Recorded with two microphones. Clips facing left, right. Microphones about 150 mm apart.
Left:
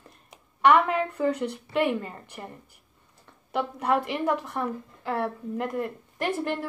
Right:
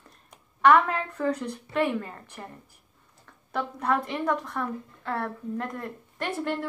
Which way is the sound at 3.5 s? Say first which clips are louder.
Left 2 dB; 10° left (ahead or behind).